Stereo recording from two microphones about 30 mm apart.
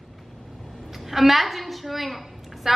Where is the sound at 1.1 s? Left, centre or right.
Centre.